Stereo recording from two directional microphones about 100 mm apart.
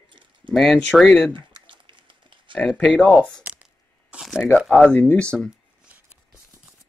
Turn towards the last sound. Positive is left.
turn(degrees=-15)  # may be behind; listen again after turning